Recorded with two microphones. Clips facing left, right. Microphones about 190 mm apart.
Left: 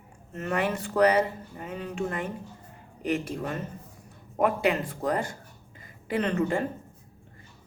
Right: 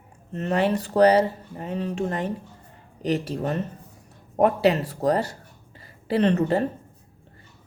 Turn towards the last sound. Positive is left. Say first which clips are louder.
# right 5 dB
turn(degrees=-35)  # may be behind; listen again after turning